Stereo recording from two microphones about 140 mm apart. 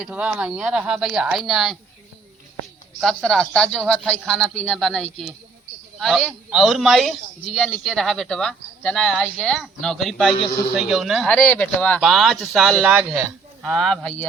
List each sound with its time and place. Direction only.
0.0 s a man's voice: 5° right (ahead or behind)
3.0 s a man's voice: 5° left (ahead or behind)
11.3 s speech: 10° left (ahead or behind)
11.9 s a man's voice: centre (ahead or behind)